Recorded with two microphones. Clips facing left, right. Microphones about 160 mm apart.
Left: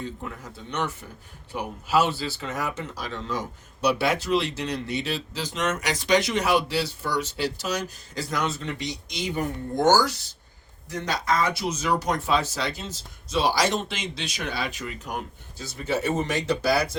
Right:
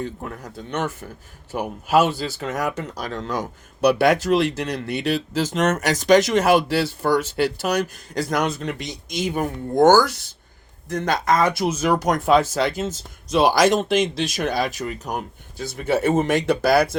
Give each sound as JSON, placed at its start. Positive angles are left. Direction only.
{"t": 1.5, "sound": "speech", "side_deg": -50}
{"t": 15.5, "sound": "speech", "side_deg": -55}